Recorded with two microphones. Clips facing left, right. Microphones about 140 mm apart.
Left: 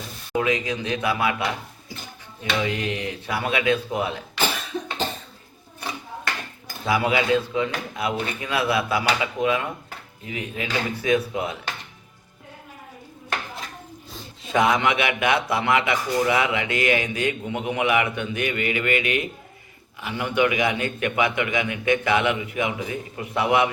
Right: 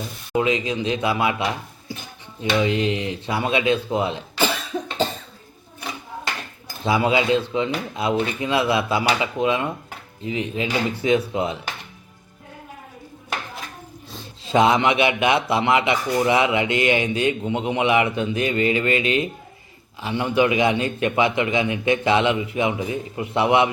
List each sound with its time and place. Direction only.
0.3 s a man's voice: 25° right (ahead or behind)
2.4 s a man's voice: 25° right (ahead or behind)
6.8 s a man's voice: 25° right (ahead or behind)
14.4 s a man's voice: 25° right (ahead or behind)